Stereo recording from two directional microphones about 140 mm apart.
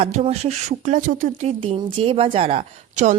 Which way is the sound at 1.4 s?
45° right (ahead or behind).